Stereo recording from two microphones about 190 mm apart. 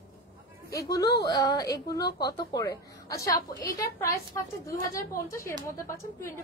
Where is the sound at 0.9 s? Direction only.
20° left (ahead or behind).